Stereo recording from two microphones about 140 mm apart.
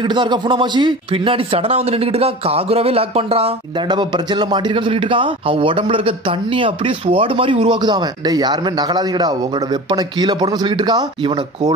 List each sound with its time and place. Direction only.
0.0 s a man's voice: 35° right (ahead or behind)